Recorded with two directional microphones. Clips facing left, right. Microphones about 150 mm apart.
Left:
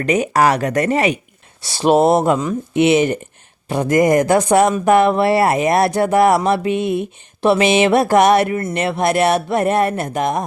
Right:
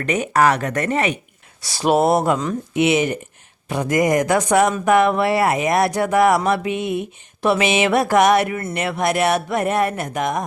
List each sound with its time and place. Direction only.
0.0 s speech: 35° left (ahead or behind)